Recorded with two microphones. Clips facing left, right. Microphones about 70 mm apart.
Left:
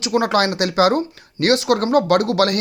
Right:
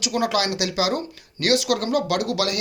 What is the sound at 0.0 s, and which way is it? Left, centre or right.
Speech, left.